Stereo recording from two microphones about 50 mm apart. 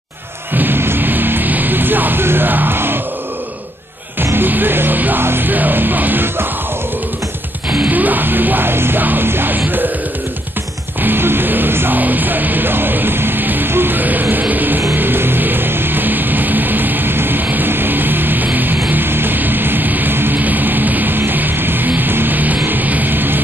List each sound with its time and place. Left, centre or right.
0.6 s music: right
4.2 s music: right
7.7 s music: right
11.0 s music: right